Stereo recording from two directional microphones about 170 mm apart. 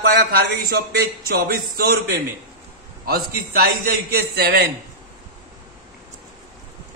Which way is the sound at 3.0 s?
60° right (ahead or behind).